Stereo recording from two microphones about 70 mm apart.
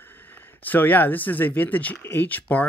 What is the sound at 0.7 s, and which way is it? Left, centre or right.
Speech, left.